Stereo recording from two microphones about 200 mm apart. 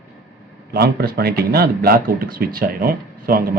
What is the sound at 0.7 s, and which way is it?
Speech, 50° right (ahead or behind).